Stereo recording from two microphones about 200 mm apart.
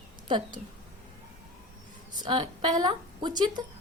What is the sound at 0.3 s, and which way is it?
Speech, 25° right (ahead or behind).